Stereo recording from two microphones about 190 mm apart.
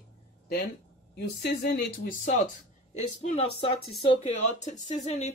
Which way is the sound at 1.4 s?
60° left (ahead or behind).